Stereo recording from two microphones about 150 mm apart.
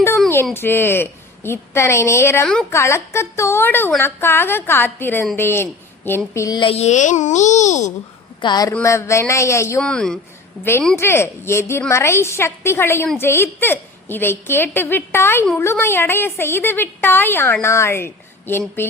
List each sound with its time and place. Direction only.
0.5 s a woman's voice: 15° left (ahead or behind)
6.6 s a child's voice: 40° left (ahead or behind)
8.4 s speech: 30° left (ahead or behind)
9.8 s a woman's voice: 5° left (ahead or behind)